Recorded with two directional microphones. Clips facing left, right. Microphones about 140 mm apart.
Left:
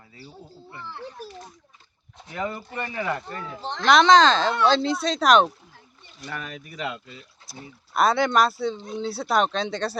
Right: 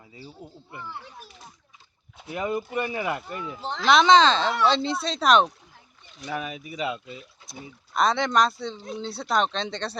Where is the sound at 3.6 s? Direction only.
5° right (ahead or behind).